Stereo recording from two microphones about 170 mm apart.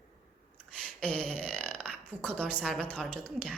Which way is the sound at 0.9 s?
5° left (ahead or behind).